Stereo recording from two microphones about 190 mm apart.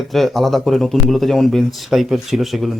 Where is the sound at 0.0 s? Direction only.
Centre (ahead or behind).